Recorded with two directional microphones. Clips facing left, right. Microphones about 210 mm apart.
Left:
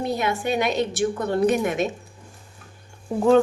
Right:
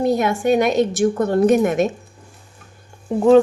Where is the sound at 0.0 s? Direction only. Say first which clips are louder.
Right 7 dB; 45° right (ahead or behind).